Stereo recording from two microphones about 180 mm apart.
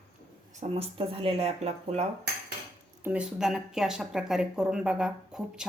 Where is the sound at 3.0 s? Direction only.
5° right (ahead or behind).